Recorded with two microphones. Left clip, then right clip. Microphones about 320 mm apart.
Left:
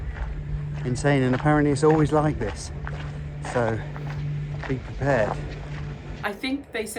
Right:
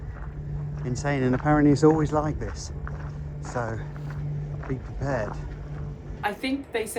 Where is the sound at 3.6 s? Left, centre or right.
Left.